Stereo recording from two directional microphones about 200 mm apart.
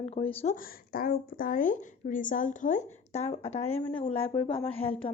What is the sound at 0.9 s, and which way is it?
A woman's voice, 45° left (ahead or behind).